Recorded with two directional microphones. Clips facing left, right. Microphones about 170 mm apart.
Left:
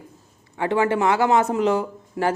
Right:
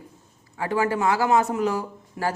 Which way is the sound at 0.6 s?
25° left (ahead or behind).